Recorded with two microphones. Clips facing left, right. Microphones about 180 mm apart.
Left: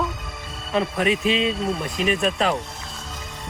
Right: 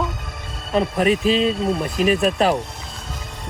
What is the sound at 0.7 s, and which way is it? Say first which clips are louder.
Speech: right 3 dB; centre (ahead or behind).